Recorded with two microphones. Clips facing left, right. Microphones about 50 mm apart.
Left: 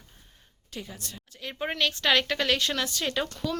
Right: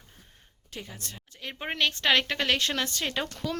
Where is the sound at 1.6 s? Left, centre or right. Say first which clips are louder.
Even; right.